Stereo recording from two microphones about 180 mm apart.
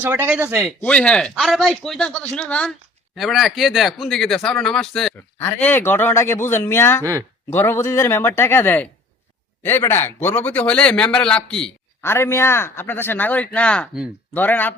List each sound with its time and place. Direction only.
0.0 s a man's voice: 10° right (ahead or behind)
0.8 s a man's voice: 5° left (ahead or behind)
7.0 s a man's voice: 15° right (ahead or behind)
7.5 s a man's voice: 15° left (ahead or behind)